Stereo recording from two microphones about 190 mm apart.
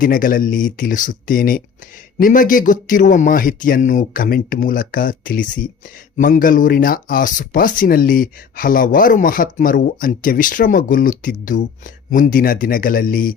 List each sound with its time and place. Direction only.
0.0 s speech: 45° left (ahead or behind)